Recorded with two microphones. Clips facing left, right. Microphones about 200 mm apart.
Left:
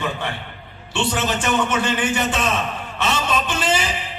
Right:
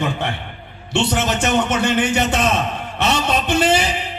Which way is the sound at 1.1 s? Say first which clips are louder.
Right 3 dB; 70° right (ahead or behind).